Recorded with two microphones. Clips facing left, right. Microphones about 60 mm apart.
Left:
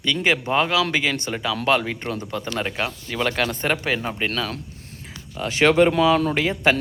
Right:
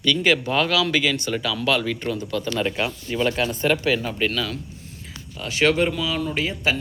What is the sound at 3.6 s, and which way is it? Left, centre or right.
Speech, left.